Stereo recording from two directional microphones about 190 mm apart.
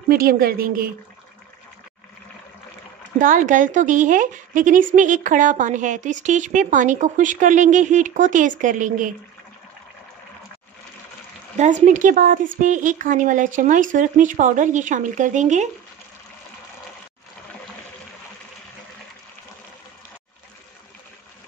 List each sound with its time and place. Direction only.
0.1 s a woman's voice: 50° right (ahead or behind)
3.2 s a woman's voice: 45° right (ahead or behind)
11.5 s speech: 40° right (ahead or behind)